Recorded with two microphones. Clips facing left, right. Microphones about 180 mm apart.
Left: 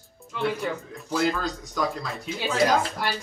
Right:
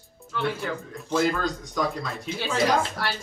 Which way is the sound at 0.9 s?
Centre (ahead or behind).